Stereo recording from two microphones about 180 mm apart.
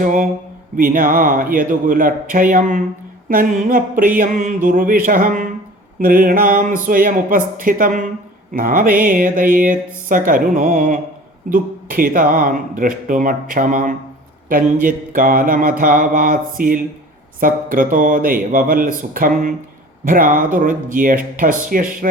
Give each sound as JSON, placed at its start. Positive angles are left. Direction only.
{"t": 0.0, "sound": "speech", "side_deg": -50}